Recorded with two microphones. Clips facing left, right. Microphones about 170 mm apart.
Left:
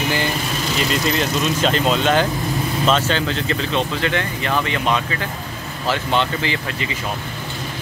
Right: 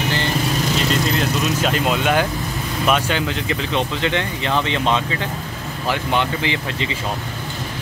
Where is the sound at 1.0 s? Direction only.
Centre (ahead or behind); by 6.9 s 20° right (ahead or behind).